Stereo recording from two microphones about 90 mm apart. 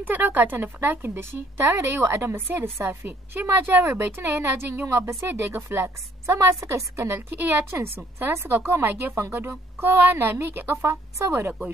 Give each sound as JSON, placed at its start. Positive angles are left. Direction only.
{"t": 0.0, "sound": "a woman's voice", "side_deg": -20}